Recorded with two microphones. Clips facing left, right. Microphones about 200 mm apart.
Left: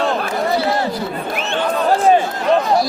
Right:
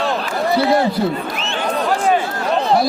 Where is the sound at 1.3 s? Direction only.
55° left (ahead or behind).